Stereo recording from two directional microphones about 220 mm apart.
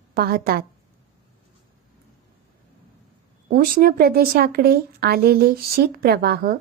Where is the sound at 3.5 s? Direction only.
40° right (ahead or behind).